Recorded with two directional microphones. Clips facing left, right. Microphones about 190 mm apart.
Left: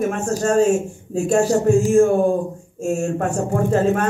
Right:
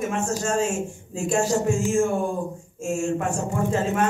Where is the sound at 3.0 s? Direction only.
60° left (ahead or behind).